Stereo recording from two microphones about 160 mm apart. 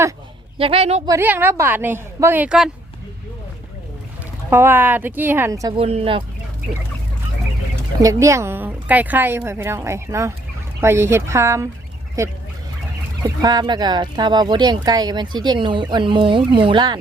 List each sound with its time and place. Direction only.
0.6 s speech: 35° right (ahead or behind)
1.0 s a woman's voice: 15° right (ahead or behind)
4.4 s a woman's voice: 15° right (ahead or behind)
5.7 s speech: 35° right (ahead or behind)
8.0 s a woman's voice: 20° right (ahead or behind)